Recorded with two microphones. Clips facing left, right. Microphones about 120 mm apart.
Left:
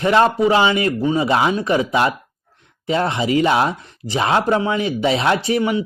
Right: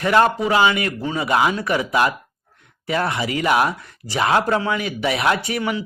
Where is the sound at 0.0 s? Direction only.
25° left (ahead or behind).